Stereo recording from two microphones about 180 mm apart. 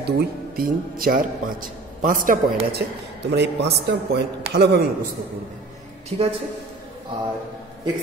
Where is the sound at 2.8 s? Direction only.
70° right (ahead or behind).